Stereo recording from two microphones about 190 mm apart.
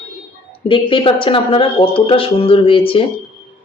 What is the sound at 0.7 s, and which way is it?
Speech, 25° left (ahead or behind).